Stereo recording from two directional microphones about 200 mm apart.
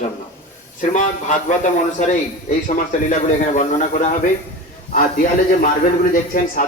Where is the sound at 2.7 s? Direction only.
40° left (ahead or behind).